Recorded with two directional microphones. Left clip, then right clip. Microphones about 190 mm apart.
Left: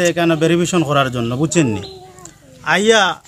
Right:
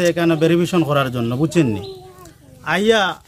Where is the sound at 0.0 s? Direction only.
10° right (ahead or behind).